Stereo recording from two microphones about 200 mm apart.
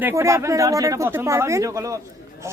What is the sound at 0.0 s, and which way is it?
A woman's voice, 15° right (ahead or behind).